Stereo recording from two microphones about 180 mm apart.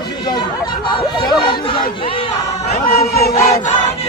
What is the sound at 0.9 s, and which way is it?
Speech, 25° left (ahead or behind).